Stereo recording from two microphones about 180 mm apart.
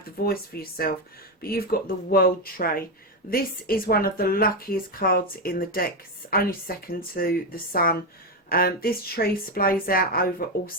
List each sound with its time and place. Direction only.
0.3 s speech: 55° left (ahead or behind)